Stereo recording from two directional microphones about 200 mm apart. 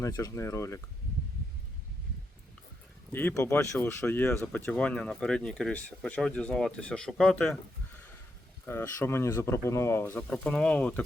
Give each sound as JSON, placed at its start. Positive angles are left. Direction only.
{"t": 0.0, "sound": "speech", "side_deg": 15}
{"t": 3.1, "sound": "speech", "side_deg": 10}
{"t": 8.6, "sound": "speech", "side_deg": 10}